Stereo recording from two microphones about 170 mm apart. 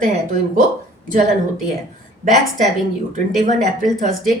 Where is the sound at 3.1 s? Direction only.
50° right (ahead or behind).